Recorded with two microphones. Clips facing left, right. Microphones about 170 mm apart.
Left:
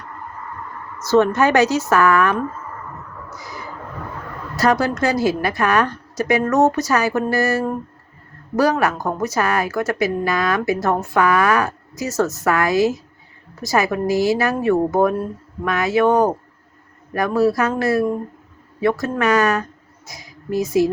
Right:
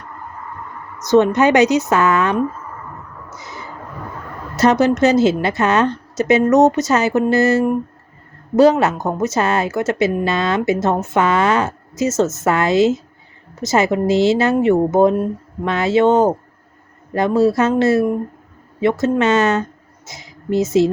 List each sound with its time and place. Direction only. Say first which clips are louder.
0.9 s a woman's voice: right 2 dB; 20° right (ahead or behind)
3.2 s a sound: even; 25° right (ahead or behind)
4.5 s a woman's voice: right 4 dB; 20° right (ahead or behind)